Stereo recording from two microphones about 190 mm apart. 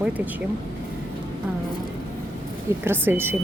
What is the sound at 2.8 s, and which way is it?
Speech, 10° right (ahead or behind).